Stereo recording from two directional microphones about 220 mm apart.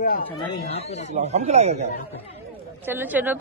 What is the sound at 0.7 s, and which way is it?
Speech, 30° left (ahead or behind).